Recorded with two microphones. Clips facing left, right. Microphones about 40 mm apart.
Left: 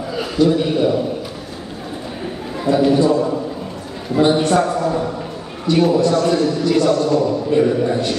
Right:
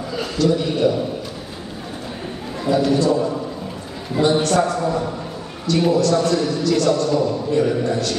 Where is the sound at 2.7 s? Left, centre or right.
Centre.